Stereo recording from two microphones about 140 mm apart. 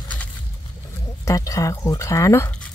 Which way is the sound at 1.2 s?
25° left (ahead or behind).